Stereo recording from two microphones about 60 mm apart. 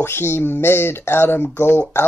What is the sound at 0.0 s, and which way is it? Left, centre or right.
Speech, left.